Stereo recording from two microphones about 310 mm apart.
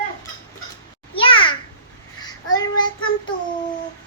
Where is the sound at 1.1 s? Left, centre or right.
Centre.